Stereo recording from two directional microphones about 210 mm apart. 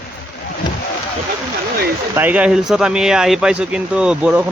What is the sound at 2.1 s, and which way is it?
Speech, 10° right (ahead or behind).